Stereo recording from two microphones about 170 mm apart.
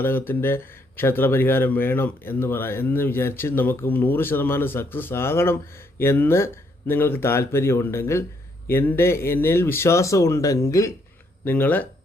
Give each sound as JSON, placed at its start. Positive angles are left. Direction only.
{"t": 0.0, "sound": "speech", "side_deg": 15}